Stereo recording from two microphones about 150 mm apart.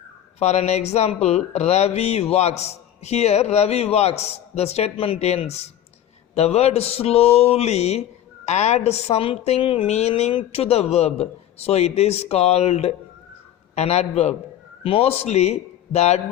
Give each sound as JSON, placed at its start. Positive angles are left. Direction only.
{"t": 0.3, "sound": "speech", "side_deg": 45}